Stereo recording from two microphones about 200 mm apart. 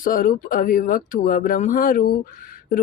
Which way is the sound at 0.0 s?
45° left (ahead or behind).